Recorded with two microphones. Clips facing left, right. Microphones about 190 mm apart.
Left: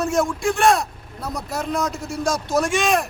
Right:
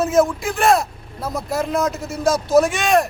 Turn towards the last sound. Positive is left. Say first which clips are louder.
# right 4 dB
turn(degrees=0)  # may be behind; listen again after turning